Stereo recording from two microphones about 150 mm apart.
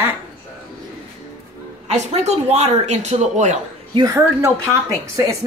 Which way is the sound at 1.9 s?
50° right (ahead or behind).